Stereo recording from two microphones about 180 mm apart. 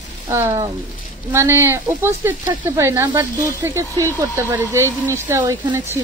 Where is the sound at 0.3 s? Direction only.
15° right (ahead or behind).